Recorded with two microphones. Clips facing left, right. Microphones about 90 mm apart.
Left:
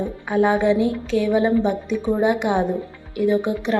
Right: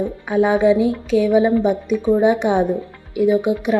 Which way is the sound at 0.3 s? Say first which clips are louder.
Right 3 dB; 15° right (ahead or behind).